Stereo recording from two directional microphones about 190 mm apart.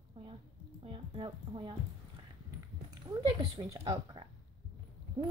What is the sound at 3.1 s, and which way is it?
A woman's voice, 25° right (ahead or behind).